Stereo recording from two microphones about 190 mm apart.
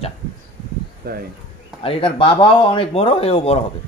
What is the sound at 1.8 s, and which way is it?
A man's voice, 30° left (ahead or behind).